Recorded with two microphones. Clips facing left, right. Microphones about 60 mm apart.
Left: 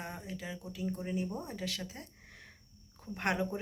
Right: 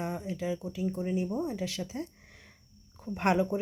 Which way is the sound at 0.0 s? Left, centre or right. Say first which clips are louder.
Right 8 dB; right.